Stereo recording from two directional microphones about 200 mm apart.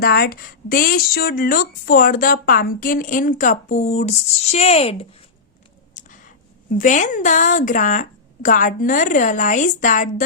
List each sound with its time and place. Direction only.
0.0 s speech: 50° left (ahead or behind); by 5.0 s 30° left (ahead or behind)
5.9 s a sound: 40° left (ahead or behind)
6.7 s speech: 40° left (ahead or behind)